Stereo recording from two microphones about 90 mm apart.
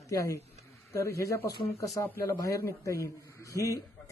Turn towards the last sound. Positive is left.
turn(degrees=40)  # may be behind; listen again after turning